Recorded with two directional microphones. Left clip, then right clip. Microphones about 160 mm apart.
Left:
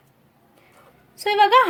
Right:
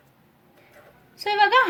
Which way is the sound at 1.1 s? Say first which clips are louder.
Left 3 dB; 40° left (ahead or behind).